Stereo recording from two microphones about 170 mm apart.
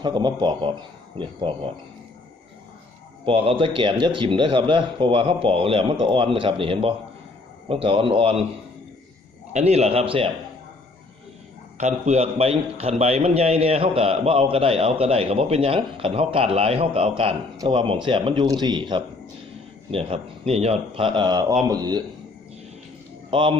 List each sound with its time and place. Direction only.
0.0 s speech: 25° right (ahead or behind)
3.2 s a man's voice: 30° right (ahead or behind)
9.5 s a man's voice: 40° right (ahead or behind)
11.8 s a man's voice: 45° right (ahead or behind); by 22.0 s 25° right (ahead or behind)
23.3 s speech: 30° right (ahead or behind)